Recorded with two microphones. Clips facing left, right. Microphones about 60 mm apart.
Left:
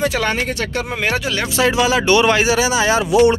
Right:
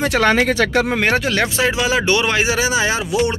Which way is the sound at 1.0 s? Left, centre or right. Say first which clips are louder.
Right 3 dB; right.